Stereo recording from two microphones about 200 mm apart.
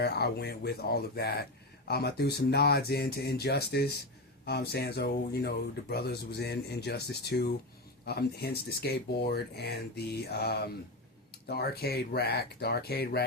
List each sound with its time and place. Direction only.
0.0 s speech: 55° left (ahead or behind)